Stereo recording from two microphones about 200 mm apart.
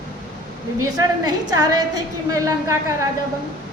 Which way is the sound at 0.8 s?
20° right (ahead or behind).